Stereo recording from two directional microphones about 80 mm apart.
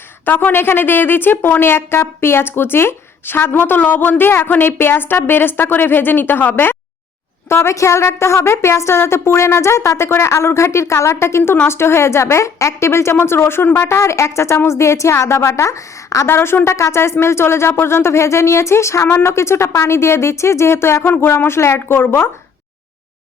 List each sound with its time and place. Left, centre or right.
0.3 s a woman's voice: left
16.2 s a woman's voice: left